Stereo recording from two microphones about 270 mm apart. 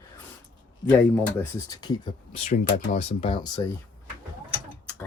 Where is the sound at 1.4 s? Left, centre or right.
Centre.